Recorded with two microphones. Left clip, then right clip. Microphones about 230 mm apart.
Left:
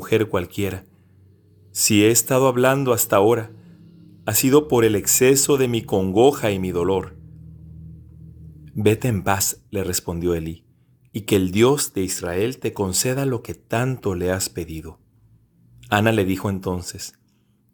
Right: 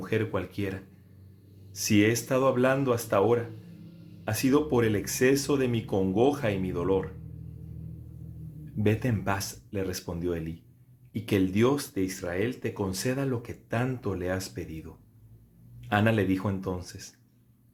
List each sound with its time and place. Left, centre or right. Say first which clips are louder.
0.0 s speech: left 9 dB; left
8.8 s speech: left 9 dB; left